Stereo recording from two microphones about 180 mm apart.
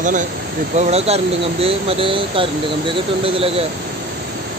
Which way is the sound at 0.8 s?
35° right (ahead or behind).